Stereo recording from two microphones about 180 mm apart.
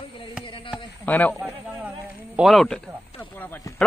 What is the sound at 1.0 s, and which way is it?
Speech, 10° left (ahead or behind).